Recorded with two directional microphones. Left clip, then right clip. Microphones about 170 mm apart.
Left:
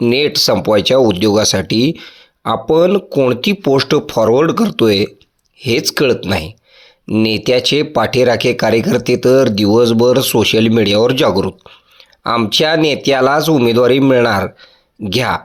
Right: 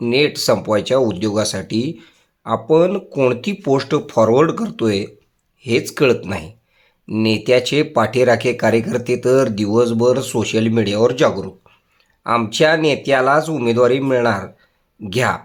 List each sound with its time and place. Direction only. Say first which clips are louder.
0.1 s speech: even; 40° left (ahead or behind)